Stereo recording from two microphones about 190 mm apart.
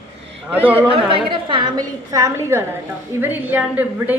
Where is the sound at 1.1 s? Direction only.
25° right (ahead or behind).